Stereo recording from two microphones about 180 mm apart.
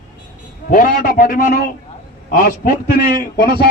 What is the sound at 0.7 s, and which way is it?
A man's voice, 55° left (ahead or behind).